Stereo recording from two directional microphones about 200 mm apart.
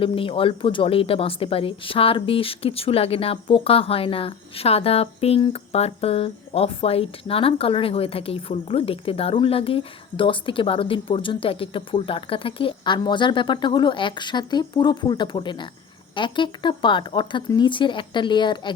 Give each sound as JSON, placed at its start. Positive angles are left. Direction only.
{"t": 0.0, "sound": "speech", "side_deg": 25}